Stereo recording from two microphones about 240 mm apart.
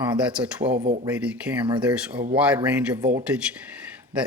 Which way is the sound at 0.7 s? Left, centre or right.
Right.